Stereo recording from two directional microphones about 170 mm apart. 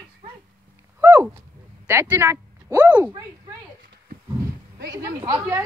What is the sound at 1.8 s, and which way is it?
A woman's voice, 10° right (ahead or behind).